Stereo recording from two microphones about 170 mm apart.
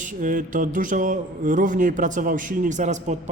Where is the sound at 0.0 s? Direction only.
50° right (ahead or behind).